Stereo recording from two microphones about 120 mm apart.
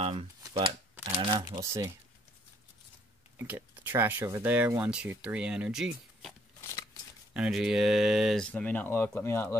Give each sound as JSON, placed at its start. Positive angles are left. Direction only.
{"t": 0.0, "sound": "speech", "side_deg": -50}
{"t": 1.1, "sound": "crumpling", "side_deg": -40}
{"t": 1.4, "sound": "speech", "side_deg": -25}
{"t": 3.3, "sound": "speech", "side_deg": -20}
{"t": 6.6, "sound": "a sound", "side_deg": 25}
{"t": 7.3, "sound": "speech", "side_deg": -5}
{"t": 8.4, "sound": "speech", "side_deg": 10}